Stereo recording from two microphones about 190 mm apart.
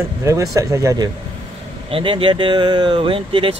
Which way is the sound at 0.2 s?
15° right (ahead or behind).